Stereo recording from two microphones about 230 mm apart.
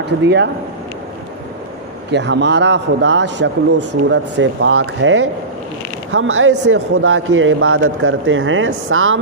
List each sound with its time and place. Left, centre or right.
0.0 s a man's voice: right
2.0 s a man's voice: right
6.1 s speech: right